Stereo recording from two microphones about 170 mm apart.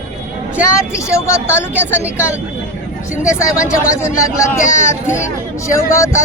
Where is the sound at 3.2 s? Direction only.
5° right (ahead or behind).